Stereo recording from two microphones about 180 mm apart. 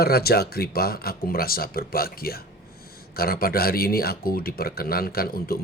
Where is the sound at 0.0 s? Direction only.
60° left (ahead or behind).